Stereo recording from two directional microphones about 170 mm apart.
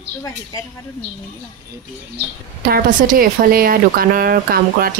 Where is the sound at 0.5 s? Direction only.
20° left (ahead or behind).